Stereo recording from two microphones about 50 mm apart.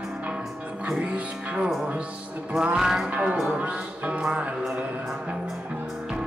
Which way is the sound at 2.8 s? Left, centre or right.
Centre.